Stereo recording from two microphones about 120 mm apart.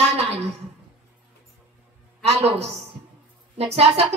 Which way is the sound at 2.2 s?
65° right (ahead or behind).